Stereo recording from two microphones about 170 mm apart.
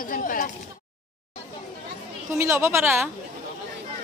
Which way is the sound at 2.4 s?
15° right (ahead or behind).